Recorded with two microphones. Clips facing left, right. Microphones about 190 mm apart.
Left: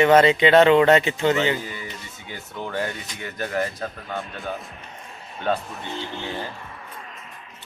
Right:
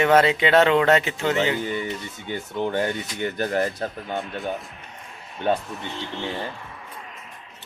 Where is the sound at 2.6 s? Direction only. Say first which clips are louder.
Right 4 dB; 20° right (ahead or behind).